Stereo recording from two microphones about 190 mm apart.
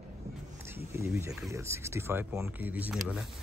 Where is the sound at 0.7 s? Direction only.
10° right (ahead or behind).